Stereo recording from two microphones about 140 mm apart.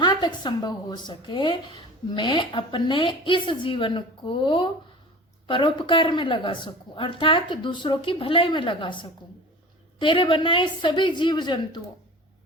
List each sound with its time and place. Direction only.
0.0 s a woman's voice: 30° left (ahead or behind)